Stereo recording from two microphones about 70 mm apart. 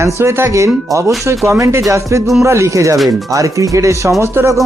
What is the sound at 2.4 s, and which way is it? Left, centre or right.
Speech, right.